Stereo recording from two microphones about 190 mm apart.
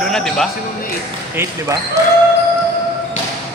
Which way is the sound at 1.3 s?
10° right (ahead or behind).